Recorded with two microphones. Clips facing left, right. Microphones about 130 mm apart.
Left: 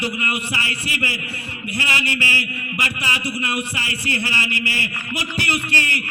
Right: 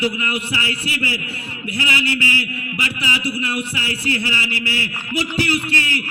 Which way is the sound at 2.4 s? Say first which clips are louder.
Right 1 dB; 55° left (ahead or behind).